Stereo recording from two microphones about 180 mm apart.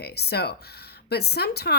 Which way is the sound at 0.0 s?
65° left (ahead or behind).